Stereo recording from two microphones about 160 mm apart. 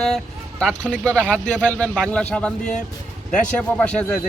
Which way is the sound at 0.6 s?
5° left (ahead or behind).